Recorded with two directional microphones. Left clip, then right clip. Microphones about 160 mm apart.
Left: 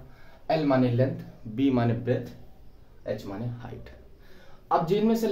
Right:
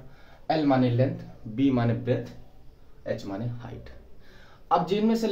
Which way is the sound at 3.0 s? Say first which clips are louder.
Right 1 dB; 15° left (ahead or behind).